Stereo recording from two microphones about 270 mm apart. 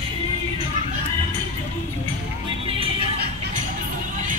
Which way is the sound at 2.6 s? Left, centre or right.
Centre.